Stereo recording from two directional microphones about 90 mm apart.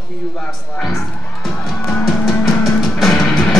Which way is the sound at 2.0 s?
Centre (ahead or behind).